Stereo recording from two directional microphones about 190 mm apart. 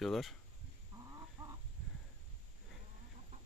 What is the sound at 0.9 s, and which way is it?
Chicken, 20° right (ahead or behind).